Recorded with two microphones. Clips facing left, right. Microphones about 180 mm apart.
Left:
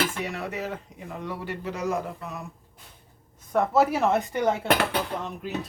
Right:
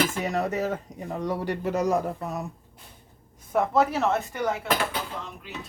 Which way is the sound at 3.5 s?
Centre (ahead or behind).